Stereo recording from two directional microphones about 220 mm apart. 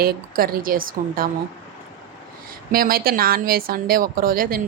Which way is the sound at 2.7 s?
40° right (ahead or behind).